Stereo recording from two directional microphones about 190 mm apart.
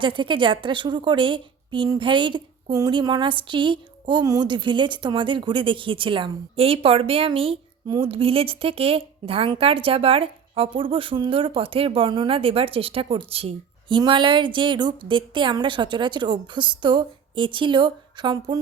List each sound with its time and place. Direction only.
0.0 s a woman's voice: 25° right (ahead or behind)